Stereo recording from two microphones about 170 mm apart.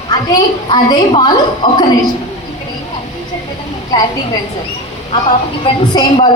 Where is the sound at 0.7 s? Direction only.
25° left (ahead or behind).